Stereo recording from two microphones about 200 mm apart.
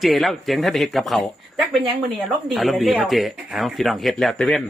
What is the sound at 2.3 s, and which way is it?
Speech, centre (ahead or behind).